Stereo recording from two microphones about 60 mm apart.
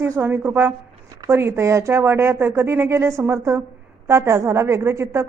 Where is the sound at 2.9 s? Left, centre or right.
Right.